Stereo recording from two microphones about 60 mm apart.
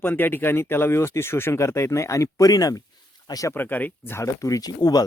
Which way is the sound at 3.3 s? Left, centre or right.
Left.